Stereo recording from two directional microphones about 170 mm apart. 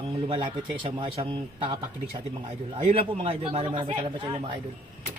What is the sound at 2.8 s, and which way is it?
Speech, 35° right (ahead or behind).